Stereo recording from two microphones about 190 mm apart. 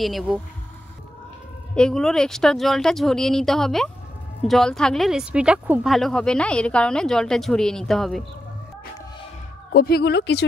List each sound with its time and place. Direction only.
0.0 s speech: centre (ahead or behind)
1.8 s speech: 5° left (ahead or behind)
9.8 s speech: 55° left (ahead or behind)